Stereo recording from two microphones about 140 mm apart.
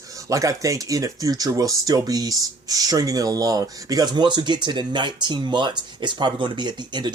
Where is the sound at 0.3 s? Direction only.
25° right (ahead or behind).